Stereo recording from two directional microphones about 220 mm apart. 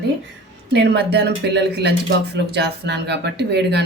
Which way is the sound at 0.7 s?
50° right (ahead or behind).